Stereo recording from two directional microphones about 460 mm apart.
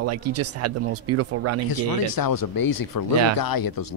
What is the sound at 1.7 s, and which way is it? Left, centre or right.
Speech, left.